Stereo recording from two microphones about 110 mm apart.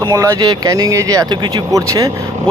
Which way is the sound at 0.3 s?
40° right (ahead or behind).